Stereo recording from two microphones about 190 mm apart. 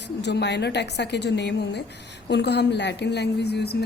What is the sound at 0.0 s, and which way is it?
A woman's voice, 65° left (ahead or behind).